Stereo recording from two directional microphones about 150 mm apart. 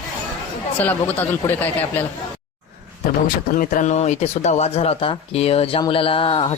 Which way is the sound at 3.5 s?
65° left (ahead or behind).